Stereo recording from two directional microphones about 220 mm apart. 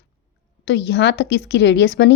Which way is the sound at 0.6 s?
50° left (ahead or behind).